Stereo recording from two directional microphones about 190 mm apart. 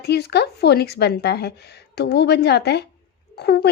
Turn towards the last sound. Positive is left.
turn(degrees=60)  # may be behind; listen again after turning